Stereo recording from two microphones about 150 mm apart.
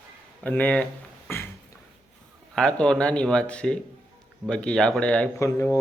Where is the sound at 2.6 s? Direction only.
5° left (ahead or behind).